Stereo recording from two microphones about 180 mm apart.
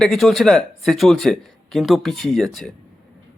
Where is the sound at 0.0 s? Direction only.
Centre (ahead or behind).